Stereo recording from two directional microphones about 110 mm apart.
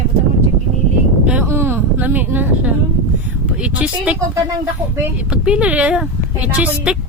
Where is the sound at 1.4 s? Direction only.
20° right (ahead or behind).